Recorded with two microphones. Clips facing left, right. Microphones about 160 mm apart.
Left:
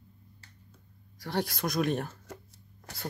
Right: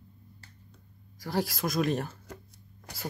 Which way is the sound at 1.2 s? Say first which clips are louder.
Right 1 dB; centre (ahead or behind).